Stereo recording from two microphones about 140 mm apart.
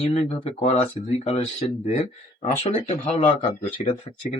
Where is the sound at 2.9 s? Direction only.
40° left (ahead or behind).